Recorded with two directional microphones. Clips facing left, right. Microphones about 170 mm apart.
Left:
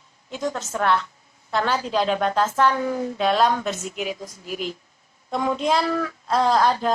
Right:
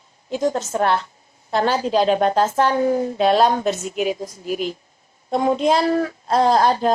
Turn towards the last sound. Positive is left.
turn(degrees=-30)  # may be behind; listen again after turning